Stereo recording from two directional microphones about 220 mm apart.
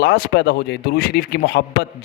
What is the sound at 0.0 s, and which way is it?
A man's voice, 50° left (ahead or behind).